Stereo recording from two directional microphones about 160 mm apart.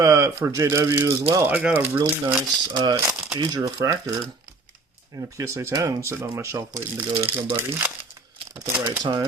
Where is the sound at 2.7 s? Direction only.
25° right (ahead or behind).